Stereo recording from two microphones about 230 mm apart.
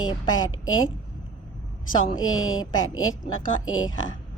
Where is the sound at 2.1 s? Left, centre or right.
Left.